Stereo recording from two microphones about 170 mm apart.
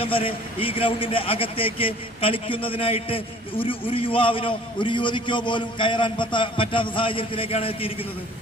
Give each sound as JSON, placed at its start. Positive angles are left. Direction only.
{"t": 0.0, "sound": "a man's voice", "side_deg": 30}